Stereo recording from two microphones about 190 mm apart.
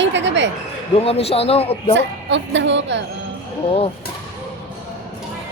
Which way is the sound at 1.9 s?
70° right (ahead or behind).